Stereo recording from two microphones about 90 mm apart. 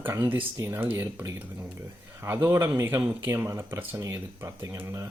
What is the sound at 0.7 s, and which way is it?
Speech, 25° right (ahead or behind).